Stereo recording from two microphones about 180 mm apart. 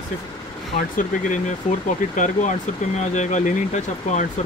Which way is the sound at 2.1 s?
45° left (ahead or behind).